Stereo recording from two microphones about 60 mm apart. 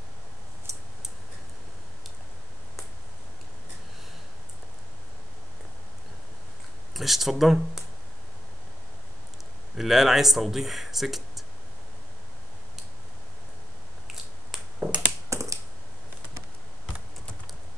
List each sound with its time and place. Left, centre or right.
6.9 s speech: centre
9.8 s speech: centre
14.8 s crushing: centre
15.2 s computer keyboard: right